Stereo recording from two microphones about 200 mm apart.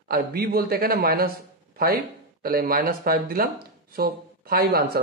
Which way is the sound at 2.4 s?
45° right (ahead or behind).